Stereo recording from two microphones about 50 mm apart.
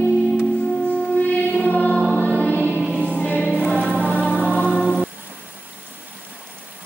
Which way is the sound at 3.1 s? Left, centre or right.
Left.